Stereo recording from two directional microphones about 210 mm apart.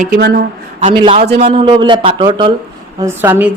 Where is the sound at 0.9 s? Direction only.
25° right (ahead or behind).